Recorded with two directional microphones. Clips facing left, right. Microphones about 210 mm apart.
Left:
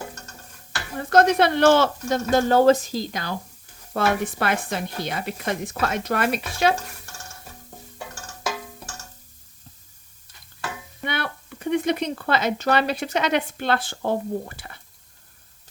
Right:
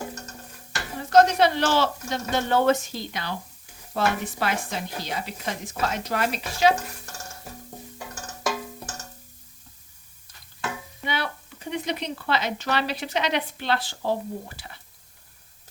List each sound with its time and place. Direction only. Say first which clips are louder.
0.9 s speech: left 1 dB; 55° left (ahead or behind)
3.9 s speech: left 3 dB; 55° left (ahead or behind)
11.0 s speech: left 1 dB; 55° left (ahead or behind)